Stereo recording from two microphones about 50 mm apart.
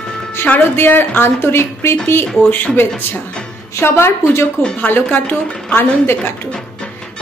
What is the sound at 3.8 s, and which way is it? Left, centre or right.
Speech, left.